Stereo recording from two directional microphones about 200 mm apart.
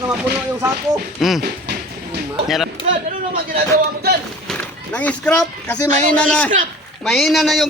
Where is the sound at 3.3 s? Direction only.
50° right (ahead or behind).